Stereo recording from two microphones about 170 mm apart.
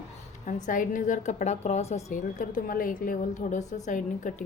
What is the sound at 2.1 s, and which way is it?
A woman's voice, 50° left (ahead or behind).